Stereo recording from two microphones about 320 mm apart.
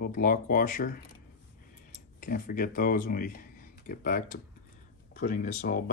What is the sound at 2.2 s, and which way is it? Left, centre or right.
Speech, left.